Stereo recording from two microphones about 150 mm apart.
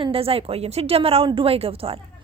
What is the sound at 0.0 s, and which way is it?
A woman's voice, 40° right (ahead or behind).